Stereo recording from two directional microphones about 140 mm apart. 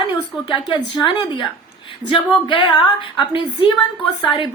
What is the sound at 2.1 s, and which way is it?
Speech, 35° left (ahead or behind).